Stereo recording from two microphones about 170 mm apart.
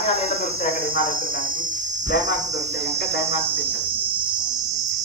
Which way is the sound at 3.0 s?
75° left (ahead or behind).